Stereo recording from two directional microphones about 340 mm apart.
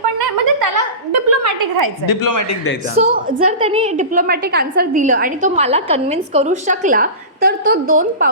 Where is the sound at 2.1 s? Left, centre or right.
Left.